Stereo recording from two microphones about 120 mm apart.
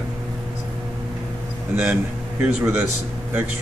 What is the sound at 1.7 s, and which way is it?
A man's voice, 10° right (ahead or behind).